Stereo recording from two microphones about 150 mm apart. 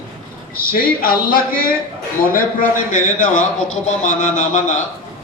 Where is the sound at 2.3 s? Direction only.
65° left (ahead or behind).